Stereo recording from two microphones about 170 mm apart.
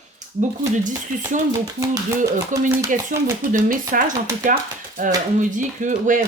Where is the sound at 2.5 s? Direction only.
50° right (ahead or behind).